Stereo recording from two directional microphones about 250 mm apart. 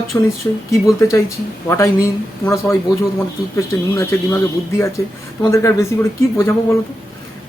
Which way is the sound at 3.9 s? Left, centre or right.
Centre.